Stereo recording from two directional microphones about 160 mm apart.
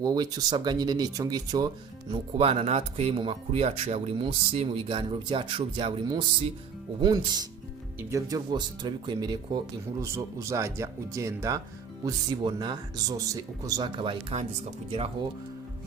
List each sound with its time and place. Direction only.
0.0 s speech: 25° right (ahead or behind)